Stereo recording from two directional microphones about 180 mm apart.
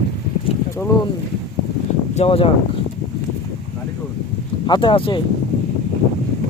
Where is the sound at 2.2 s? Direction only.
30° left (ahead or behind).